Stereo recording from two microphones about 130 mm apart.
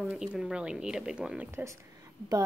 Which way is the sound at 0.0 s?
5° right (ahead or behind).